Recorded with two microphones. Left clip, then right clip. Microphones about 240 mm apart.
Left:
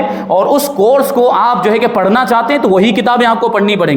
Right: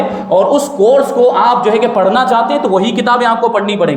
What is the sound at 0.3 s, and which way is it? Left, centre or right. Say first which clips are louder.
A man's voice: right 1 dB; left.